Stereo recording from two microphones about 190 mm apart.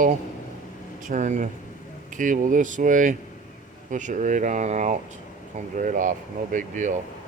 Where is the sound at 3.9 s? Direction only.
40° right (ahead or behind).